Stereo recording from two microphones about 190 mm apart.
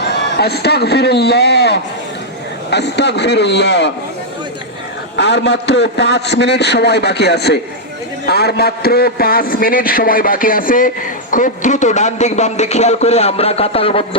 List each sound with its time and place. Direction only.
0.0 s a man's voice: 60° left (ahead or behind)
5.1 s a man's voice: 65° left (ahead or behind); by 14.2 s 30° left (ahead or behind)